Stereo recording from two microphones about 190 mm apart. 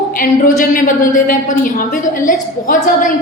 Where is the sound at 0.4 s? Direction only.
40° left (ahead or behind).